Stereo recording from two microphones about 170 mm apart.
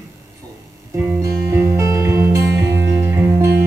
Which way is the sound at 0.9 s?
15° right (ahead or behind).